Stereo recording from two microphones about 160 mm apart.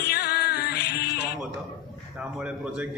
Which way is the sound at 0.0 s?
90° left.